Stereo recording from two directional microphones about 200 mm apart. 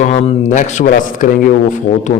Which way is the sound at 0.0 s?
35° left (ahead or behind).